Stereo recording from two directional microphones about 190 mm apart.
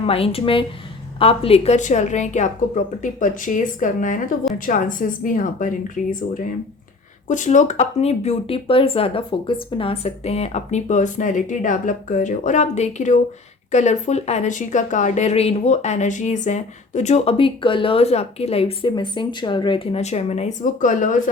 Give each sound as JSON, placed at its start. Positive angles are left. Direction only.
{"t": 0.0, "sound": "a woman's voice", "side_deg": 30}